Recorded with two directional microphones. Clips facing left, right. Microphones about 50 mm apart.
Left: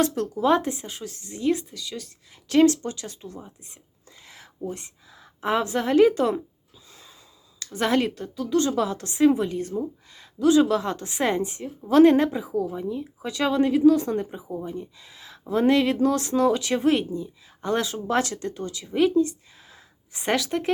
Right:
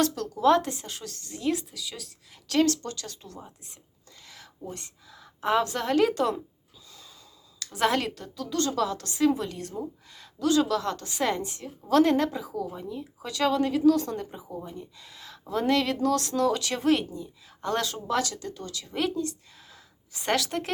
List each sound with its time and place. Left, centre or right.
0.0 s a woman's voice: left
1.4 s speech: centre
2.5 s a woman's voice: centre
4.2 s a sound: left
4.7 s a woman's voice: centre
7.6 s speech: centre
9.6 s speech: centre
10.4 s a woman's voice: centre
18.1 s speech: left
19.1 s a sound: centre
20.2 s speech: centre